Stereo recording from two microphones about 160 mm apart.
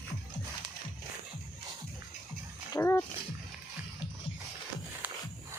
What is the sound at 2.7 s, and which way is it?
Dog, 15° left (ahead or behind).